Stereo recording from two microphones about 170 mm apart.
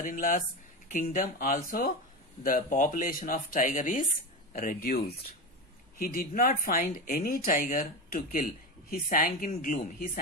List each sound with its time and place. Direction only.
0.0 s speech: 50° left (ahead or behind)